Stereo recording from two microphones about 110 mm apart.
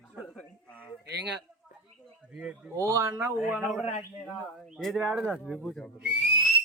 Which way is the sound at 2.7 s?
25° right (ahead or behind).